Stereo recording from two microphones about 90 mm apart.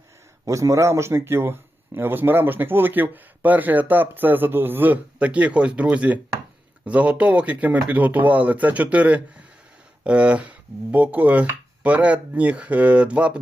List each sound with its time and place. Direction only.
0.4 s a man's voice: 35° right (ahead or behind); by 13.4 s 15° right (ahead or behind)